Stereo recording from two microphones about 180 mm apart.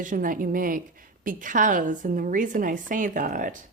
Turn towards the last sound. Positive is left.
turn(degrees=-50)  # may be behind; listen again after turning